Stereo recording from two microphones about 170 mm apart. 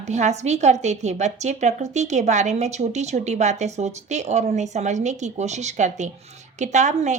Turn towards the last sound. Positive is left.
turn(degrees=-45)  # may be behind; listen again after turning